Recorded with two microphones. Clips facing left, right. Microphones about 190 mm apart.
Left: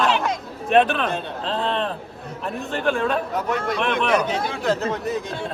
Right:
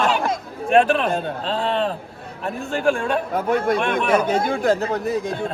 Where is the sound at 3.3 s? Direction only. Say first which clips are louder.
Right 4 dB; 50° right (ahead or behind).